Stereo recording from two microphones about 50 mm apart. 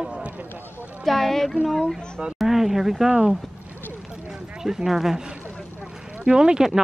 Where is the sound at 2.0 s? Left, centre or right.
Centre.